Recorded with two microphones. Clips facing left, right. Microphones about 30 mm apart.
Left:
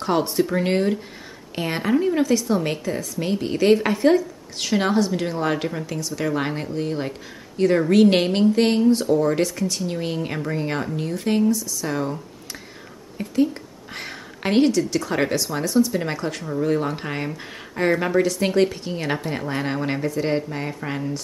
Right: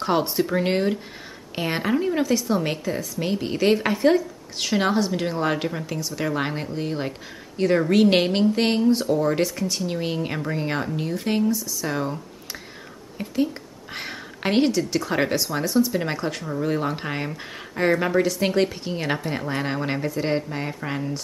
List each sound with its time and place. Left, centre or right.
0.0 s speech: centre
13.2 s speech: centre